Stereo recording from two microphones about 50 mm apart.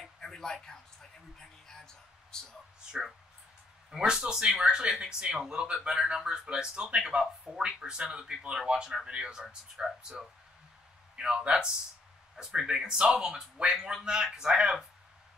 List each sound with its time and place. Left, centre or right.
0.0 s a sound: centre
1.4 s music: centre
3.9 s speech: centre